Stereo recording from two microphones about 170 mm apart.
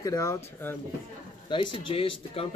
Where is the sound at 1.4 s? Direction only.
30° left (ahead or behind).